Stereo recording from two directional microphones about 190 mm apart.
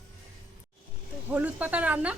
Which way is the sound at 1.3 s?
10° right (ahead or behind).